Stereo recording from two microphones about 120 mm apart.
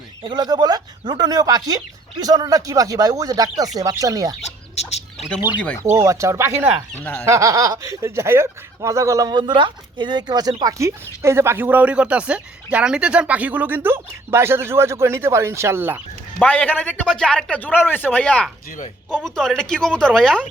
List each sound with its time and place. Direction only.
0.2 s speech: 40° right (ahead or behind)
4.4 s chicken: 65° left (ahead or behind)
5.8 s speech: 25° right (ahead or behind)
7.0 s a man's voice: 15° left (ahead or behind)
7.3 s speech: 25° right (ahead or behind)
9.4 s speech: 45° right (ahead or behind); by 16.0 s 20° right (ahead or behind)
16.4 s a man's voice: 10° left (ahead or behind)